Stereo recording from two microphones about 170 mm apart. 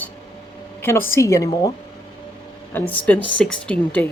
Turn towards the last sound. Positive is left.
turn(degrees=10)  # may be behind; listen again after turning